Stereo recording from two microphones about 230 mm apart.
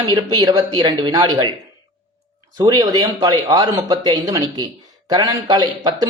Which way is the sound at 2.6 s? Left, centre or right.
Centre.